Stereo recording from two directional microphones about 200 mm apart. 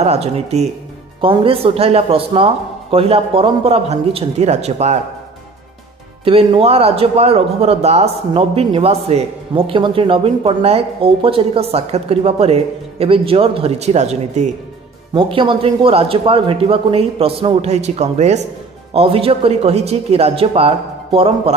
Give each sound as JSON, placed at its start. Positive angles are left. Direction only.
{"t": 0.0, "sound": "a man's voice", "side_deg": -30}
{"t": 6.2, "sound": "a man's voice", "side_deg": -25}